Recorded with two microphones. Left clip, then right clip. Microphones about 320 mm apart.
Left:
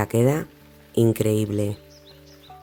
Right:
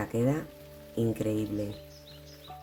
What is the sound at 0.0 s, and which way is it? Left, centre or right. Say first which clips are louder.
Speech: left 8 dB; left.